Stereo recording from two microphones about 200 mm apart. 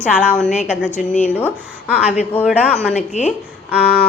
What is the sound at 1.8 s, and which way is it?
A woman's voice, 5° right (ahead or behind).